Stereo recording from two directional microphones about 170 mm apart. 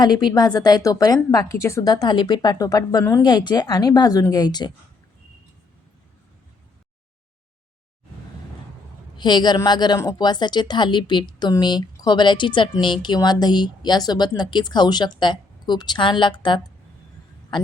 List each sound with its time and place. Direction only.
0.0 s a woman's voice: 25° left (ahead or behind)
9.1 s a woman's voice: 25° left (ahead or behind)